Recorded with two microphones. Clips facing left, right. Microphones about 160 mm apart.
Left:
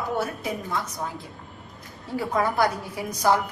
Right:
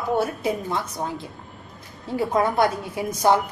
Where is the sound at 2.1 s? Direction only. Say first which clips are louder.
Right 3 dB; 25° right (ahead or behind).